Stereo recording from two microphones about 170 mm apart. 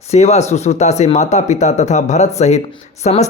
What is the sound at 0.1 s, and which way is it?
A man's voice, 40° left (ahead or behind).